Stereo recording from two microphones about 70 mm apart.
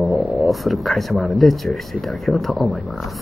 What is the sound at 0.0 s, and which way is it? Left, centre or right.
Speech, centre.